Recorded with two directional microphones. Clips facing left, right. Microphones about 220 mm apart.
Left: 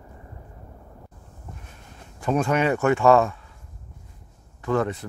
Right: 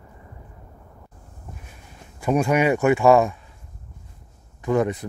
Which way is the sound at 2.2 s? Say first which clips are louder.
Right 2 dB; 10° right (ahead or behind).